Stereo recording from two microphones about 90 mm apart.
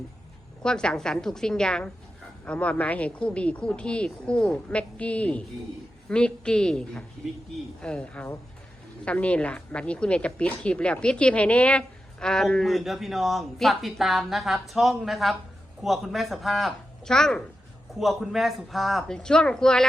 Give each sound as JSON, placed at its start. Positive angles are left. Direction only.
{"t": 0.6, "sound": "a man's voice", "side_deg": 10}